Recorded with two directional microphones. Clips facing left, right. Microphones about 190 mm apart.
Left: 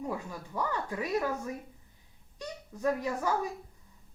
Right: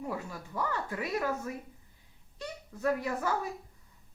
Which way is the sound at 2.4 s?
15° left (ahead or behind).